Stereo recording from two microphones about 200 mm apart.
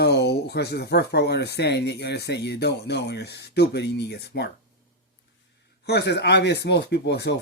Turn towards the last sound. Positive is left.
turn(degrees=60)  # may be behind; listen again after turning